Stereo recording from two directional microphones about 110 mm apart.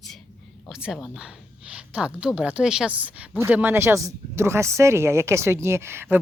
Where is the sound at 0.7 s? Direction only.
10° right (ahead or behind).